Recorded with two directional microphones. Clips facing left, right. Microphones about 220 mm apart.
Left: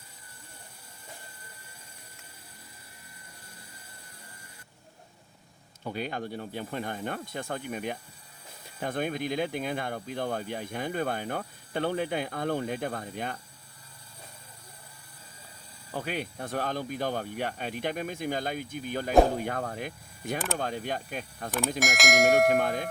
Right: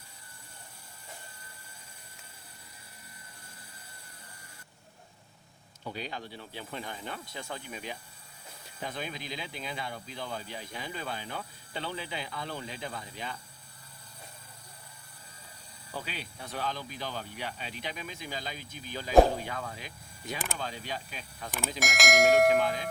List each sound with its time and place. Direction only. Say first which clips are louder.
5.8 s speech: left 5 dB; 55° left (ahead or behind)
15.9 s speech: left 7 dB; 50° left (ahead or behind)
21.8 s speech: even; centre (ahead or behind)
22.5 s speech: left 1 dB; 55° left (ahead or behind)